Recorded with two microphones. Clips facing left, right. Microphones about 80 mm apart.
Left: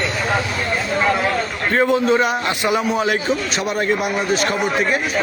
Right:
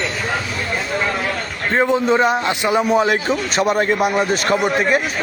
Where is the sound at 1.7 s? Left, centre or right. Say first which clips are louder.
Even; right.